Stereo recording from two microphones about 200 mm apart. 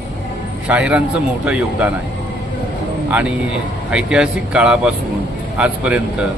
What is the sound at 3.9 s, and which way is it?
Speech, 5° right (ahead or behind).